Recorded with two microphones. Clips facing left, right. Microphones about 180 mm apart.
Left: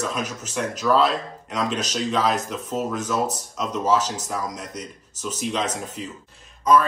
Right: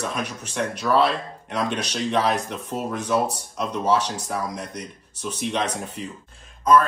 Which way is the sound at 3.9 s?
60° right (ahead or behind).